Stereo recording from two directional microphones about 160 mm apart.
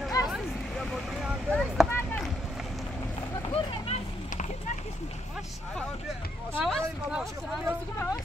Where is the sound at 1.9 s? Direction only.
15° left (ahead or behind).